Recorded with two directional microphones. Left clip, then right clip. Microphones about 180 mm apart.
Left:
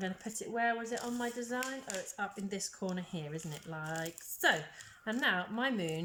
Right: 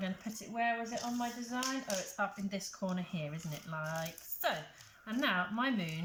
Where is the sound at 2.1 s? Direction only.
35° left (ahead or behind).